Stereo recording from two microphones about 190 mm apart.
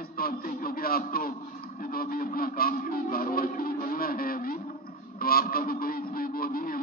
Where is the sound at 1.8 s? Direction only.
50° left (ahead or behind).